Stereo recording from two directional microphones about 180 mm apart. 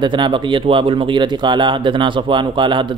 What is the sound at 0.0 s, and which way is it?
Speech, 25° right (ahead or behind).